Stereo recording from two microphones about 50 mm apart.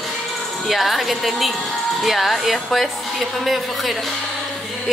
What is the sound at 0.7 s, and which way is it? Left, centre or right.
A woman's voice, centre.